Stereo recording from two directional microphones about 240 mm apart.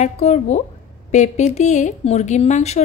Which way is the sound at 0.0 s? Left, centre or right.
Left.